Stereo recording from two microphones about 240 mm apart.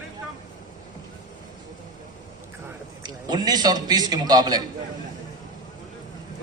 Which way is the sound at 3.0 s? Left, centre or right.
Centre.